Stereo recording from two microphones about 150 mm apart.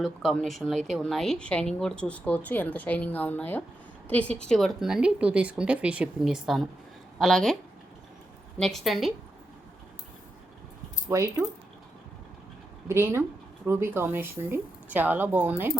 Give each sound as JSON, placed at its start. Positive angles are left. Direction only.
{"t": 0.0, "sound": "a woman's voice", "side_deg": 0}
{"t": 8.5, "sound": "speech", "side_deg": 5}
{"t": 11.1, "sound": "speech", "side_deg": -20}
{"t": 12.9, "sound": "speech", "side_deg": -15}